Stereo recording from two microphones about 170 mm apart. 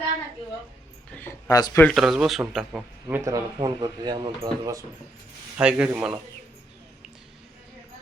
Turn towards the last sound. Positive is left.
turn(degrees=-10)  # may be behind; listen again after turning